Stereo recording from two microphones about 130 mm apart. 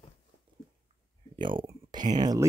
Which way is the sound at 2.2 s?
30° right (ahead or behind).